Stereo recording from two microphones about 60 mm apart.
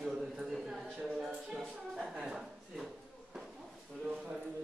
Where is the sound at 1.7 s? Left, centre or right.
Centre.